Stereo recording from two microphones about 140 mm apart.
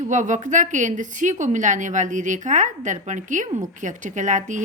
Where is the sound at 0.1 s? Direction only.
65° right (ahead or behind).